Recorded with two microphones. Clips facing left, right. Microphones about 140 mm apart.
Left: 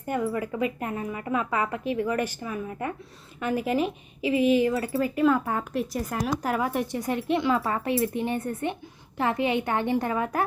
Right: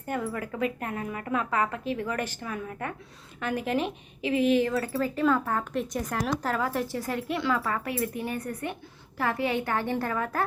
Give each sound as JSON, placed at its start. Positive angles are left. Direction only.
{"t": 0.3, "sound": "speech", "side_deg": 10}
{"t": 6.4, "sound": "speech", "side_deg": 15}